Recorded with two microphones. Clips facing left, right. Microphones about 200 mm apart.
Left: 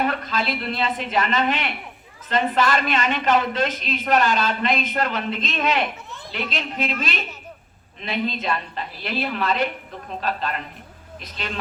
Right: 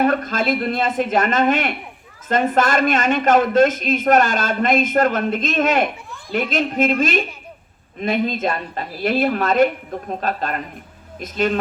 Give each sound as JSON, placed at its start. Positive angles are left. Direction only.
{"t": 0.0, "sound": "a man's voice", "side_deg": -45}